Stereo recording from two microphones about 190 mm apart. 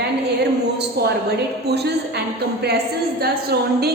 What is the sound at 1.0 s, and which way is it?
A woman's voice, 55° right (ahead or behind).